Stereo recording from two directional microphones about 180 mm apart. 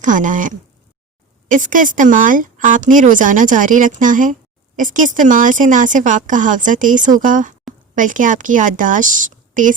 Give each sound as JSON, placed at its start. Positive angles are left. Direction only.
{"t": 0.0, "sound": "speech", "side_deg": -45}